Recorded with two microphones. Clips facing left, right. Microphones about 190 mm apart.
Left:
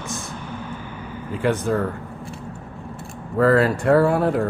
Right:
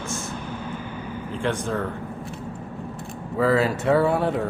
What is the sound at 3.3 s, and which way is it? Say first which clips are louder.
Speech: left 4 dB; 5° right (ahead or behind).